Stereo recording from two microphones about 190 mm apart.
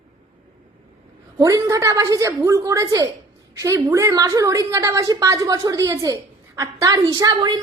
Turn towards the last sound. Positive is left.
turn(degrees=-20)  # may be behind; listen again after turning